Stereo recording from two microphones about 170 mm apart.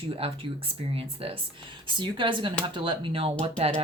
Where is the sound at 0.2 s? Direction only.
35° right (ahead or behind).